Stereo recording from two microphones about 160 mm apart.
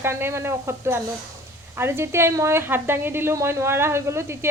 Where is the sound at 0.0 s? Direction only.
15° right (ahead or behind).